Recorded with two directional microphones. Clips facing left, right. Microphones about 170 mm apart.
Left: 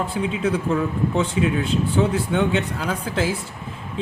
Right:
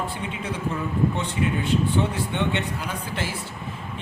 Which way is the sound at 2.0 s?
90° left.